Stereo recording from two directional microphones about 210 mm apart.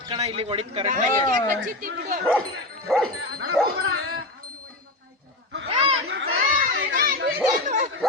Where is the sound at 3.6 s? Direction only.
5° left (ahead or behind).